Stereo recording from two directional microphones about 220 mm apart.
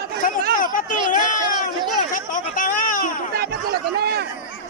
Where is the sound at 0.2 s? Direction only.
40° left (ahead or behind).